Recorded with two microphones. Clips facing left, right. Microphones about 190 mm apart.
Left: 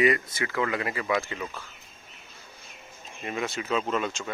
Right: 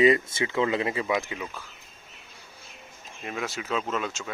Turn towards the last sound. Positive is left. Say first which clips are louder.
# left 2 dB
turn(degrees=0)  # may be behind; listen again after turning